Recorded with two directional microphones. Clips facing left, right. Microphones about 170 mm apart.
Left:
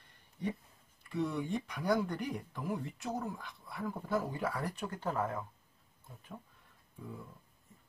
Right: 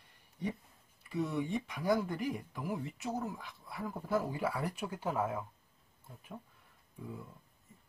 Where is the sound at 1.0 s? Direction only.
5° right (ahead or behind).